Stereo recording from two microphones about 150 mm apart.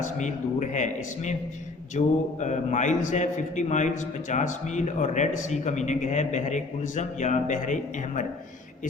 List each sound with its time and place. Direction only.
0.0 s a man's voice: 55° left (ahead or behind)